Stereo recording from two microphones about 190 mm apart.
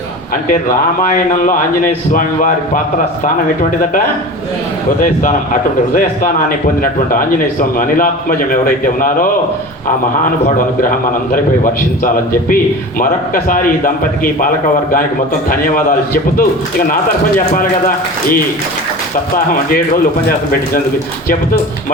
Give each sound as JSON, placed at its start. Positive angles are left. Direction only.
{"t": 0.4, "sound": "a man's voice", "side_deg": 45}
{"t": 5.9, "sound": "a man's voice", "side_deg": 45}
{"t": 10.4, "sound": "a man's voice", "side_deg": 45}
{"t": 15.4, "sound": "a man's voice", "side_deg": 45}
{"t": 17.5, "sound": "a man's voice", "side_deg": 45}